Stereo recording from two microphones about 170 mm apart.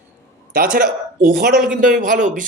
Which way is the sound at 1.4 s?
55° right (ahead or behind).